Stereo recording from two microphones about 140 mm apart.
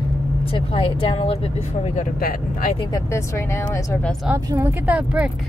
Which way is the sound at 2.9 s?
20° left (ahead or behind).